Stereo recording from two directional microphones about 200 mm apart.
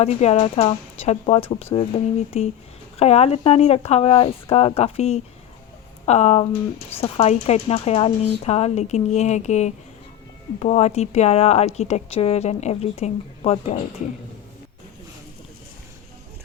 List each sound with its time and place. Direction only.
0.0 s a woman's voice: 30° left (ahead or behind)